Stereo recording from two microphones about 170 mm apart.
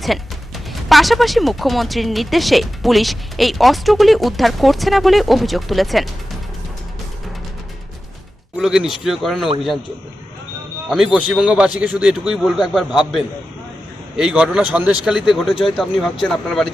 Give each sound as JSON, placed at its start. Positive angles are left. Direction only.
{"t": 0.9, "sound": "speech", "side_deg": 0}
{"t": 8.5, "sound": "speech", "side_deg": -5}
{"t": 10.8, "sound": "speech", "side_deg": 0}